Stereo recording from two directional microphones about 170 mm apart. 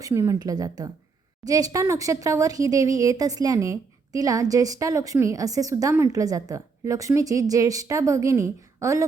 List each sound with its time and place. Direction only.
0.0 s speech: 15° right (ahead or behind)